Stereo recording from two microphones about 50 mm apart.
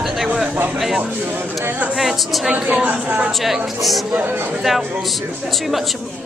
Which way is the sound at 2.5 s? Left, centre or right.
Right.